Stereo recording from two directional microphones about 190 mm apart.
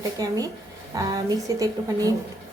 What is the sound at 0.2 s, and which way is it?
A woman's voice, 20° right (ahead or behind).